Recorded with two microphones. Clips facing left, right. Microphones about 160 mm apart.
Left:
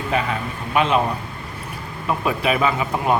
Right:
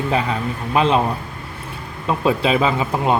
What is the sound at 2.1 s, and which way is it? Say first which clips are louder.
Speech: right 3 dB; 25° right (ahead or behind).